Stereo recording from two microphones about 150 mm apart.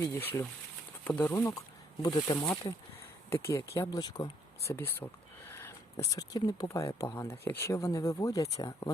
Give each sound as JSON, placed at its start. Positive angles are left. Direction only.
{"t": 0.0, "sound": "speech", "side_deg": 15}
{"t": 4.7, "sound": "speech", "side_deg": 15}